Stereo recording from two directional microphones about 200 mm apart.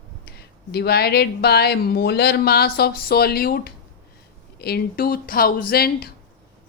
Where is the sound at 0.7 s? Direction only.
50° left (ahead or behind).